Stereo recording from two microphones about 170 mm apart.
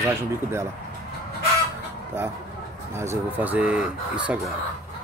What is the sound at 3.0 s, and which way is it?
Speech, 15° right (ahead or behind).